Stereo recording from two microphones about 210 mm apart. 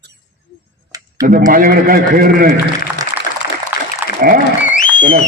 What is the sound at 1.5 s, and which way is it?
A man's voice, 40° right (ahead or behind).